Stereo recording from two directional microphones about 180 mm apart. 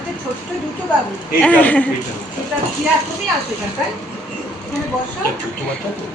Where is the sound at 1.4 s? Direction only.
10° left (ahead or behind).